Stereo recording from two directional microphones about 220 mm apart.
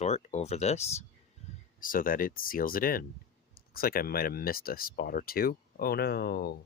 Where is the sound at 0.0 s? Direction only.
30° left (ahead or behind).